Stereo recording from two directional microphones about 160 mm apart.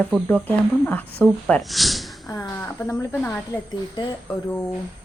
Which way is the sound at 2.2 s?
20° left (ahead or behind).